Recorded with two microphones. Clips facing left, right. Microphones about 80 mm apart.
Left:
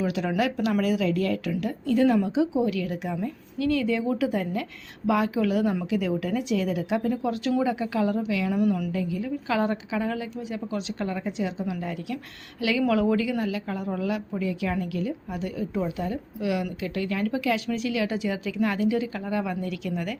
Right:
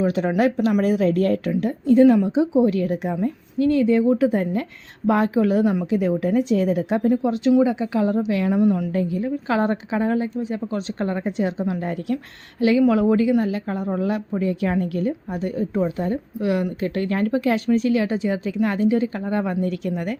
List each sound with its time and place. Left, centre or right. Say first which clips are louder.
0.0 s a woman's voice: right 6 dB; right
5.6 s a woman's voice: right 5 dB; centre
5.9 s a woman's voice: right 6 dB; right
7.1 s speech: right 7 dB; right
8.9 s a woman's voice: right 5 dB; right
12.1 s a woman's voice: right 7 dB; right